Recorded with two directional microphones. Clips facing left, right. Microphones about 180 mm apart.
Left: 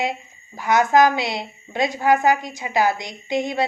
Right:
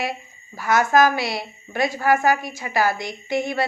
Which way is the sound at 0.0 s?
20° left (ahead or behind).